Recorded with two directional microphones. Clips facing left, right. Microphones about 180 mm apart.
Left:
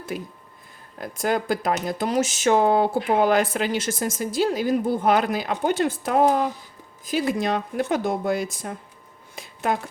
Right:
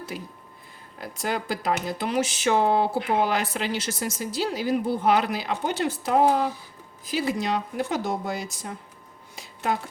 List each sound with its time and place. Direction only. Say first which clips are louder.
0.1 s speech: left 4 dB; 55° left (ahead or behind)